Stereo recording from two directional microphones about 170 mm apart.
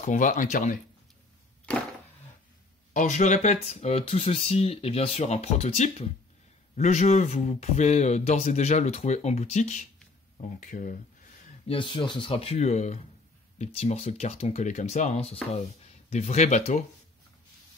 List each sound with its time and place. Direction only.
0.0 s speech: 50° left (ahead or behind)
2.9 s speech: 45° left (ahead or behind)
11.6 s speech: 30° left (ahead or behind)